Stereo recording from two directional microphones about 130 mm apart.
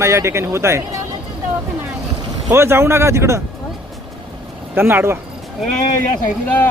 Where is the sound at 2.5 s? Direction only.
20° right (ahead or behind).